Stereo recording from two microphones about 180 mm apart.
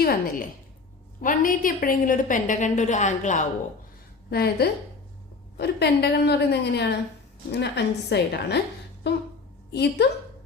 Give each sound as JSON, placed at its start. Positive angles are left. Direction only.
{"t": 0.0, "sound": "a woman's voice", "side_deg": 55}
{"t": 4.3, "sound": "a woman's voice", "side_deg": 60}